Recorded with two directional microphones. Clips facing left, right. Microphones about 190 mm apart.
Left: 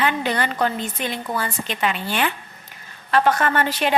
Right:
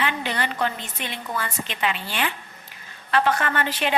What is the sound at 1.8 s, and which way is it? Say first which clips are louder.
Speech: left 3 dB; 45° left (ahead or behind).